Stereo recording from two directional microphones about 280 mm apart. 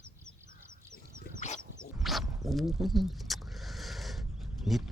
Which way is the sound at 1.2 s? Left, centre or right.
Left.